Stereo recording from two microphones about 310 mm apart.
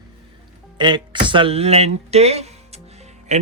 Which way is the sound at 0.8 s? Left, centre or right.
Centre.